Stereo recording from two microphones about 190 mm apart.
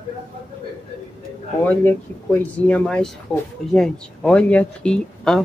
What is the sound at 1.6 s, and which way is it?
Speech, 10° left (ahead or behind).